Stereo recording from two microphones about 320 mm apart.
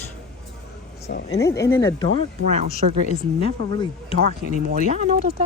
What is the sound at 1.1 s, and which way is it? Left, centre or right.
Speech, left.